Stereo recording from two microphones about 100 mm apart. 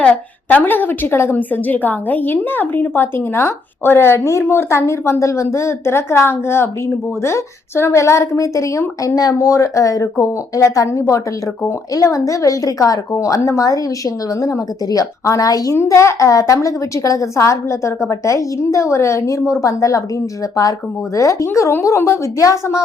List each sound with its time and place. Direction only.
0.0 s a woman's voice: 15° left (ahead or behind); by 20.0 s 35° left (ahead or behind)
21.2 s a woman's voice: 30° left (ahead or behind)